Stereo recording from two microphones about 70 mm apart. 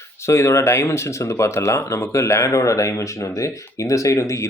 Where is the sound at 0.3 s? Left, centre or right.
Left.